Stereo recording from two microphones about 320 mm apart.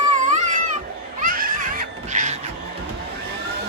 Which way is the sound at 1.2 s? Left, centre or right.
Right.